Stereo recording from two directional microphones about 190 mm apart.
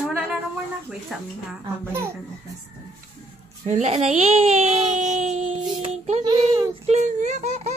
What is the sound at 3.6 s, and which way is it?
Speech, 35° right (ahead or behind).